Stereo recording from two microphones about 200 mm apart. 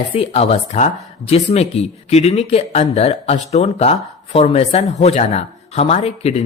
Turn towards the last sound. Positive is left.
turn(degrees=30)  # may be behind; listen again after turning